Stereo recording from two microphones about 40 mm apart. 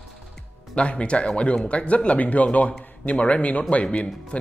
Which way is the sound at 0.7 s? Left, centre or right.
Left.